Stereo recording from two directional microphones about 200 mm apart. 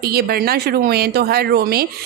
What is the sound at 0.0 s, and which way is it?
Speech, 50° right (ahead or behind).